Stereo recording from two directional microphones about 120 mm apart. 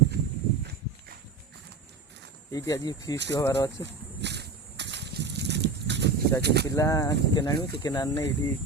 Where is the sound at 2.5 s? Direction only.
30° left (ahead or behind).